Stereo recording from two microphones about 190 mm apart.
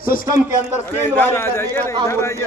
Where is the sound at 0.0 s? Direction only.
50° left (ahead or behind).